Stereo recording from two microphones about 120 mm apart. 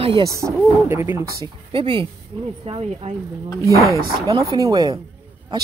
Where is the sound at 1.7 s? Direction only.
45° right (ahead or behind).